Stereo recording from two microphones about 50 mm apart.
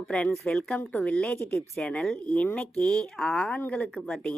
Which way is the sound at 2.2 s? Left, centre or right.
Left.